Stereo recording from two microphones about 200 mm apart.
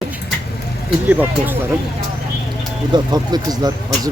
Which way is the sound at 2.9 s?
20° right (ahead or behind).